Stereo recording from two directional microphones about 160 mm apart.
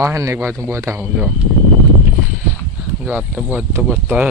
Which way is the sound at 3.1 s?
10° right (ahead or behind).